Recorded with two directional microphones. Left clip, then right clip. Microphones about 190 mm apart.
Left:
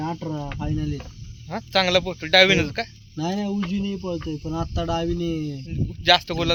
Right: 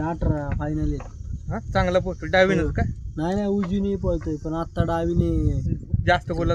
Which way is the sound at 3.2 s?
35° left (ahead or behind).